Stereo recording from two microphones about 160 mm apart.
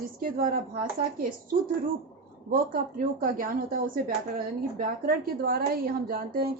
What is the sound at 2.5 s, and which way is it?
A woman's voice, 60° right (ahead or behind).